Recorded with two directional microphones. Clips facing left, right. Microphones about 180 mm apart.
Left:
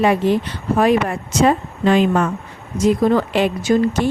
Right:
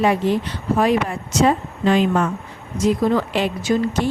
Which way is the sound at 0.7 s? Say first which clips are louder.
Left 3 dB; 60° left (ahead or behind).